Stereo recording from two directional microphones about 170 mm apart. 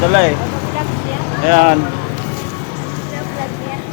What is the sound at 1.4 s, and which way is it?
Speech, 50° right (ahead or behind).